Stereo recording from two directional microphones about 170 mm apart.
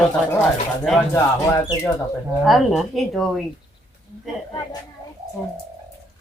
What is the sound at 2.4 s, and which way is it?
Speech, centre (ahead or behind).